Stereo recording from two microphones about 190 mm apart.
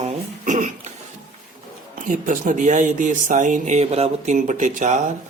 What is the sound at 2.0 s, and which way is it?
Speech, 45° right (ahead or behind).